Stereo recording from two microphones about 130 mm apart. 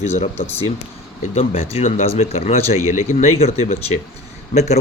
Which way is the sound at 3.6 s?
55° left (ahead or behind).